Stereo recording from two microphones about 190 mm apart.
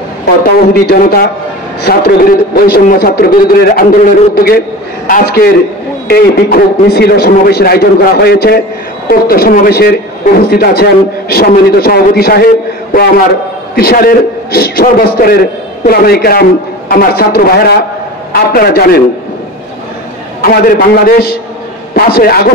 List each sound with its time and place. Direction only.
0.6 s a man's voice: 50° left (ahead or behind)
13.7 s speech: 55° left (ahead or behind)
20.4 s speech: 50° left (ahead or behind)